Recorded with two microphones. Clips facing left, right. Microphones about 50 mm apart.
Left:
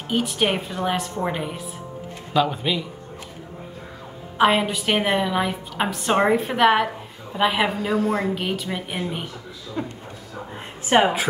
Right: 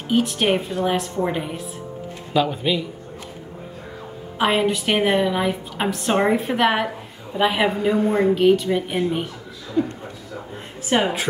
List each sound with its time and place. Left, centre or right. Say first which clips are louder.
0.1 s a woman's voice: right 3 dB; centre
4.4 s a woman's voice: left 1 dB; centre
7.7 s a woman's voice: right 3 dB; centre
8.4 s a woman's voice: right 10 dB; centre
9.8 s a man's voice: right 8 dB; left
11.0 s a woman's voice: left 4 dB; centre